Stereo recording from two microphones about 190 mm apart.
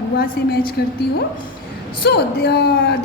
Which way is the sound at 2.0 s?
55° left (ahead or behind).